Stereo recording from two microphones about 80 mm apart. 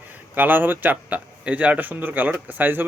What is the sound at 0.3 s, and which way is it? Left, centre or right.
A man's voice, right.